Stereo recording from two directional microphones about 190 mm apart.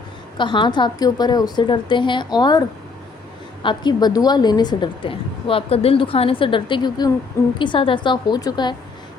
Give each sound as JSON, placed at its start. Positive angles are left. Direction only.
{"t": 0.3, "sound": "a woman's voice", "side_deg": 25}